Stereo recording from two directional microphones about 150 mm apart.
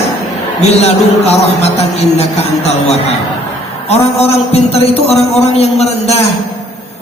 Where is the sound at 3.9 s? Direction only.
45° left (ahead or behind).